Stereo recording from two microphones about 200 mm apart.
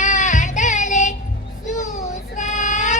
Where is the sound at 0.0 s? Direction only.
40° left (ahead or behind).